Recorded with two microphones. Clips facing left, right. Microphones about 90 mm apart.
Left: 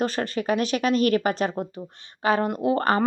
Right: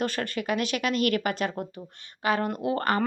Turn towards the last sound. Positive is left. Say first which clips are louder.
# left 4 dB
turn(degrees=25)  # may be behind; listen again after turning